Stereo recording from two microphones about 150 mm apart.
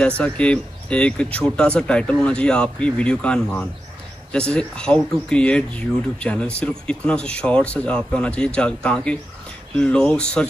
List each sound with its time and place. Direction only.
0.2 s speech: 10° left (ahead or behind)